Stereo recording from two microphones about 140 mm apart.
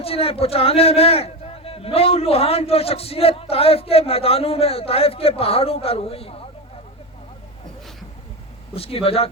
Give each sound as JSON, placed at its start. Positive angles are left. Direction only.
{"t": 0.0, "sound": "a man's voice", "side_deg": 45}
{"t": 8.7, "sound": "a man's voice", "side_deg": 45}